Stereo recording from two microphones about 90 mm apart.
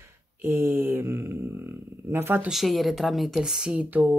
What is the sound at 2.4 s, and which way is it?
A woman's voice, centre (ahead or behind).